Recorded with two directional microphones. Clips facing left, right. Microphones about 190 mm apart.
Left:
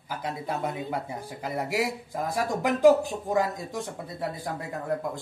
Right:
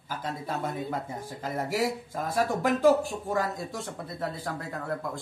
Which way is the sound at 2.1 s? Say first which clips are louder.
Even; 15° left (ahead or behind).